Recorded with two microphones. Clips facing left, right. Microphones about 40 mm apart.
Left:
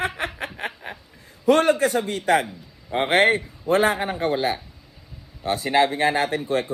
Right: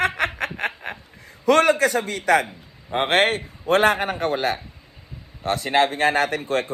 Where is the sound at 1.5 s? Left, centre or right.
Right.